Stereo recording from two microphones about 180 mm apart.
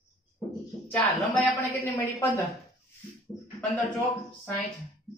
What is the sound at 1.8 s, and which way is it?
Speech, 15° left (ahead or behind).